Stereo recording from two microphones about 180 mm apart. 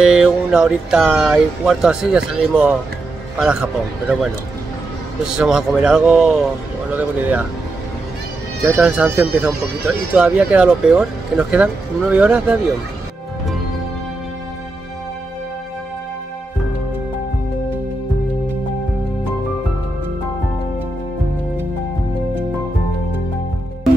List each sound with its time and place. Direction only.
0.0 s speech: 5° right (ahead or behind)
5.2 s speech: 5° right (ahead or behind)
8.6 s speech: 5° right (ahead or behind)